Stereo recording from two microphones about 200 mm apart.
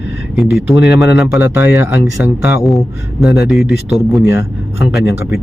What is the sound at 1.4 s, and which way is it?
Speech, 10° right (ahead or behind).